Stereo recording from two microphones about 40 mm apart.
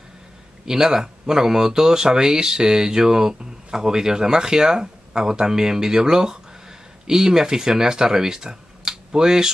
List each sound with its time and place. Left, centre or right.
0.7 s speech: centre